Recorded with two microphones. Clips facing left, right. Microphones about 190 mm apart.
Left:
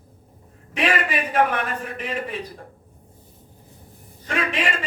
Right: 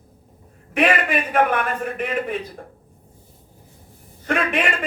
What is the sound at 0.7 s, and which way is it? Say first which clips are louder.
A man's voice: right 4 dB; 55° right (ahead or behind).